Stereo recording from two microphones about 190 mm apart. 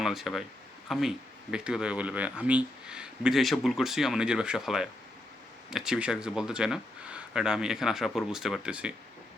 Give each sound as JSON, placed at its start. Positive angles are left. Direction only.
{"t": 0.0, "sound": "speech", "side_deg": 0}